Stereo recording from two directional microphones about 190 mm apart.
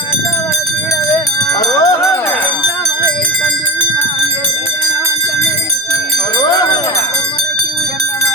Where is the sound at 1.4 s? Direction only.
20° left (ahead or behind).